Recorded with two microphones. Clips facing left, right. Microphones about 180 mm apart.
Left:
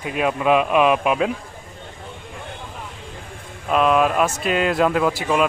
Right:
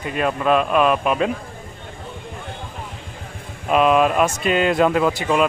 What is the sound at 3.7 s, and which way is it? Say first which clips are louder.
Speech: right 2 dB; 5° right (ahead or behind).